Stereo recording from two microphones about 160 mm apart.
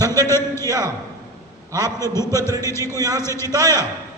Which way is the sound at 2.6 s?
15° left (ahead or behind).